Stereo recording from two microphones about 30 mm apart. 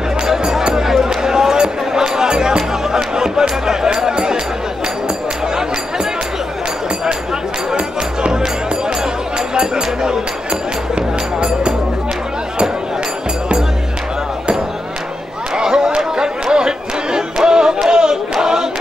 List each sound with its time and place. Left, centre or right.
0.3 s music: centre
7.7 s music: right
9.6 s a sound: right
11.0 s music: right
15.5 s a sound: right
16.0 s chatter: right
17.5 s music: right
17.8 s choir: right